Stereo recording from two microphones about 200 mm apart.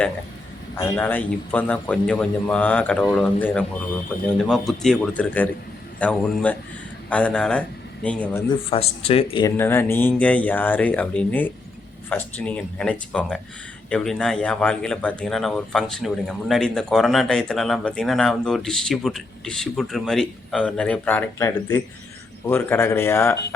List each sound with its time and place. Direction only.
0.8 s a man's voice: 10° left (ahead or behind)
8.7 s speech: 30° left (ahead or behind)
9.6 s a man's voice: 10° left (ahead or behind)